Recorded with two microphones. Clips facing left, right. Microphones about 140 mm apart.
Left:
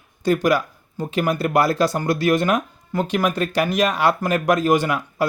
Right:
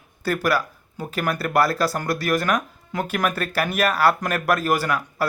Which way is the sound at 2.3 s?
25° left (ahead or behind).